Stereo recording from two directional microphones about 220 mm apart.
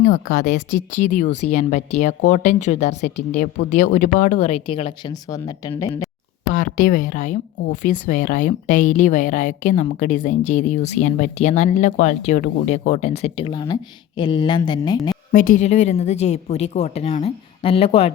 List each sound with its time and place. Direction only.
0.0 s speech: 35° left (ahead or behind); by 6.1 s 15° left (ahead or behind)
6.5 s speech: 40° left (ahead or behind); by 15.1 s 20° left (ahead or behind)
15.3 s speech: 40° left (ahead or behind)